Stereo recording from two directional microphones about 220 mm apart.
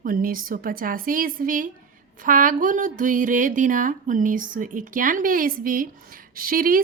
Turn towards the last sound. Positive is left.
turn(degrees=-40)  # may be behind; listen again after turning